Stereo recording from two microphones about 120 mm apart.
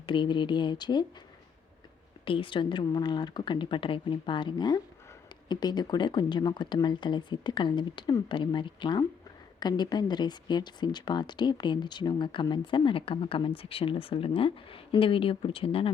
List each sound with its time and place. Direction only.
0.0 s speech: 40° left (ahead or behind)
2.2 s speech: 45° left (ahead or behind)